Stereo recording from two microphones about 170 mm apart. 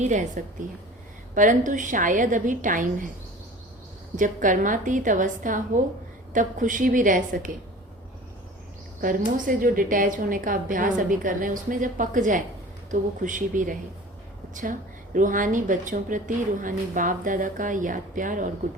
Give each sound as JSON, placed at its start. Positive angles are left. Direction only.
{"t": 0.0, "sound": "a woman's voice", "side_deg": -45}
{"t": 4.2, "sound": "a woman's voice", "side_deg": -50}
{"t": 9.0, "sound": "a woman's voice", "side_deg": -55}